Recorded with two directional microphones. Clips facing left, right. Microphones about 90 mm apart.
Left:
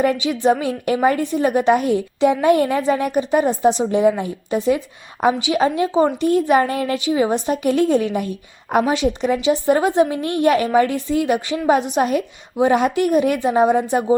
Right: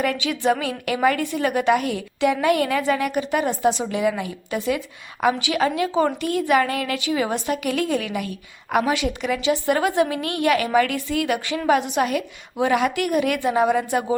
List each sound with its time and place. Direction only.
0.0 s a woman's voice: 25° left (ahead or behind)